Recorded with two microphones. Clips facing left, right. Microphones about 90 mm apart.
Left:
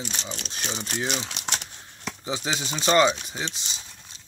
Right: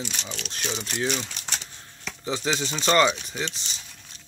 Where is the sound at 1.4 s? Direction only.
90° left.